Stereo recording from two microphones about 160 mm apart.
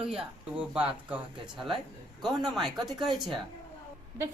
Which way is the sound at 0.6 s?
5° right (ahead or behind).